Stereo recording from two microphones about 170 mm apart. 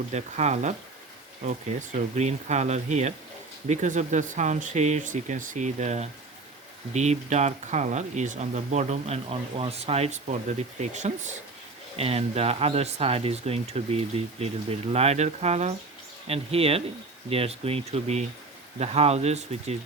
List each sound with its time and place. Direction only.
0.1 s speech: 40° right (ahead or behind)
2.1 s speech: 40° right (ahead or behind)